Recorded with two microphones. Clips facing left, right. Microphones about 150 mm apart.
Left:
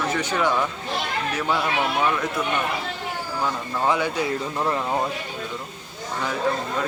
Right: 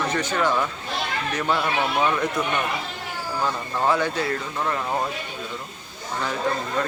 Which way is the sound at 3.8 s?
15° left (ahead or behind).